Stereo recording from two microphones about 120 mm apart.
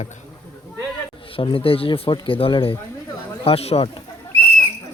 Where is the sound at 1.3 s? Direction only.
50° left (ahead or behind).